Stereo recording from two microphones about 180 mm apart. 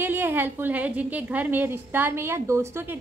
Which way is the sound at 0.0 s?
10° right (ahead or behind).